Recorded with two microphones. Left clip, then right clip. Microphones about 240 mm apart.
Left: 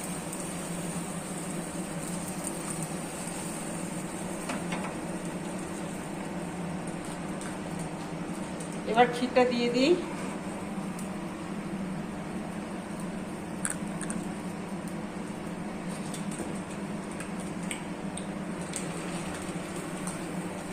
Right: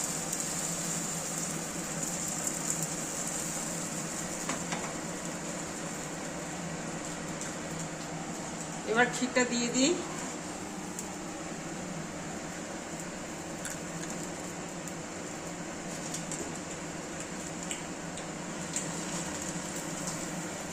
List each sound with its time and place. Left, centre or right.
9.0 s a woman's voice: centre